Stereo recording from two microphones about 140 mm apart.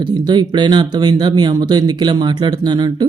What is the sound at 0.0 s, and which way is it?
Speech, 30° right (ahead or behind).